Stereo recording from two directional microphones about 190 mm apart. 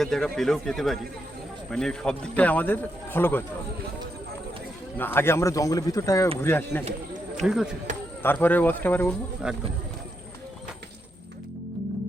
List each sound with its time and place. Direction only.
0.0 s a man's voice: 5° left (ahead or behind)
4.9 s a man's voice: 10° left (ahead or behind)
7.4 s speech: 5° right (ahead or behind)
8.2 s a man's voice: 10° left (ahead or behind)
9.4 s speech: 5° right (ahead or behind)